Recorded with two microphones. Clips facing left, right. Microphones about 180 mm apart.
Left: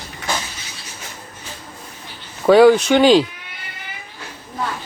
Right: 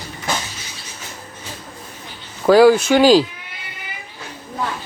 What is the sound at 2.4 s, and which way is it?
Speech, centre (ahead or behind).